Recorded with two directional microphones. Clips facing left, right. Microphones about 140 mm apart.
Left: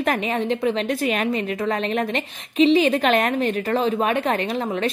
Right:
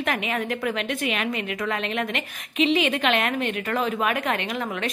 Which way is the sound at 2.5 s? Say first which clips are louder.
Left 6 dB; 35° left (ahead or behind).